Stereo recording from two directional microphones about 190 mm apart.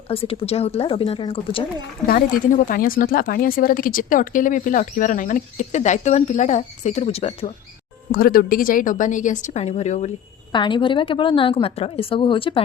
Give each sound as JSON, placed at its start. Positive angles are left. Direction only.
{"t": 0.1, "sound": "speech", "side_deg": 30}
{"t": 2.0, "sound": "speech", "side_deg": 45}
{"t": 8.1, "sound": "speech", "side_deg": 50}
{"t": 10.5, "sound": "a woman's voice", "side_deg": 25}